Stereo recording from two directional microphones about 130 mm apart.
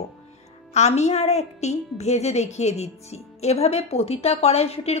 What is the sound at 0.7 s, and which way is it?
A woman's voice, 60° left (ahead or behind).